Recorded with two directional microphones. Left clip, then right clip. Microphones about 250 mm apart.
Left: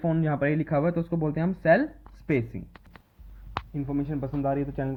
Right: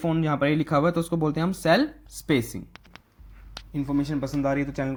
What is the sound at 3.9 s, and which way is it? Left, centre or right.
Speech, centre.